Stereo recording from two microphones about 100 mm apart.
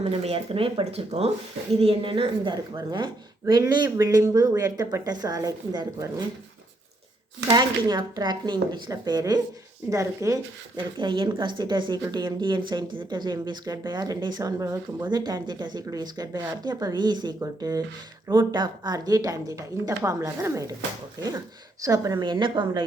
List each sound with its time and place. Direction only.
0.0 s speech: 85° right
1.8 s speech: 65° right (ahead or behind); by 6.2 s 40° right (ahead or behind)
7.5 s speech: 40° right (ahead or behind)
10.8 s speech: 50° right (ahead or behind)
14.6 s speech: 35° right (ahead or behind)
15.1 s speech: 45° right (ahead or behind)
21.8 s speech: 35° right (ahead or behind); by 22.8 s 50° right (ahead or behind)